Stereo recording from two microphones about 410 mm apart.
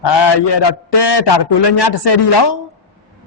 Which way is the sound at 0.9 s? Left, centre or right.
Left.